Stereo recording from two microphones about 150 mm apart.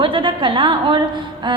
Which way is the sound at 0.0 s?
35° right (ahead or behind).